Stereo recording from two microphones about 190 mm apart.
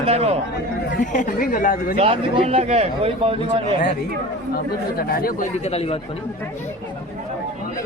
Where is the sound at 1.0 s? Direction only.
45° left (ahead or behind).